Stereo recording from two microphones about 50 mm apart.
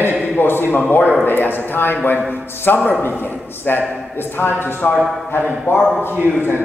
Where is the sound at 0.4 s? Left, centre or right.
Left.